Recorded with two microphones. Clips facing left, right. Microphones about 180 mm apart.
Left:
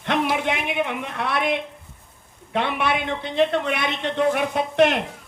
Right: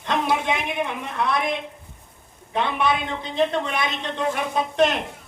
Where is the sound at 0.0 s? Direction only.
65° left (ahead or behind).